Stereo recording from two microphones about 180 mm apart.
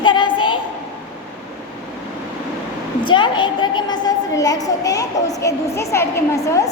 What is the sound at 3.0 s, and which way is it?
A woman's voice, 25° left (ahead or behind).